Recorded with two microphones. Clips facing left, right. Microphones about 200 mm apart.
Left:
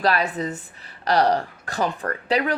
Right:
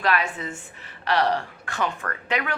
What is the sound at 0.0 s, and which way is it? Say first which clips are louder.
A woman's voice: left 3 dB; 35° left (ahead or behind).